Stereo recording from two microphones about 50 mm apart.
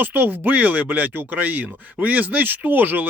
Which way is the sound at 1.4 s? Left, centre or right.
Right.